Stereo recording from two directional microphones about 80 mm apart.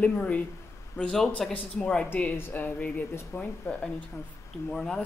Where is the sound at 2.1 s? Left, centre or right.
Left; by 5.0 s centre.